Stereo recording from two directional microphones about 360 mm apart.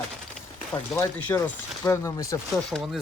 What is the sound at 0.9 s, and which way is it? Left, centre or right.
Speech, centre.